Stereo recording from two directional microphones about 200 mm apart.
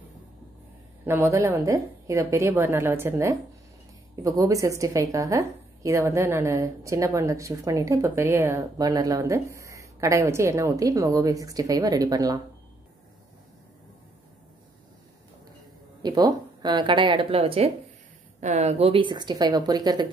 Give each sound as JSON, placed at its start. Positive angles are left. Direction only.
{"t": 1.0, "sound": "a woman's voice", "side_deg": -10}
{"t": 16.0, "sound": "speech", "side_deg": -20}